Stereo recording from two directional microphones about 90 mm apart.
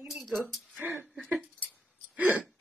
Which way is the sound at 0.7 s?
20° right (ahead or behind).